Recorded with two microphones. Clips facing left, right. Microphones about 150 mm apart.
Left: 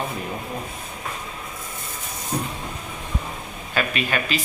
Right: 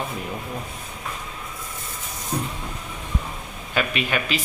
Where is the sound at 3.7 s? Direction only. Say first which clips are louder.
Even; 15° right (ahead or behind).